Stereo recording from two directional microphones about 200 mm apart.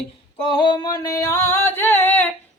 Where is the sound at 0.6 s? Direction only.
20° left (ahead or behind).